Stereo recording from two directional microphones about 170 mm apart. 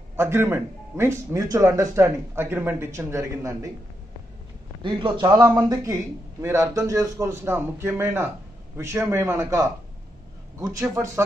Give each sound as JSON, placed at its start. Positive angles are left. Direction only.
{"t": 0.1, "sound": "speech", "side_deg": -15}
{"t": 4.8, "sound": "speech", "side_deg": -30}